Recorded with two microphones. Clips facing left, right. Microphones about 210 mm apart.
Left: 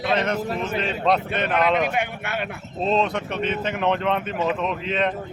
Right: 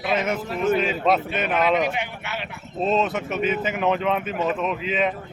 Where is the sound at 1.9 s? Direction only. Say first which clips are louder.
Left 3 dB; 55° left (ahead or behind).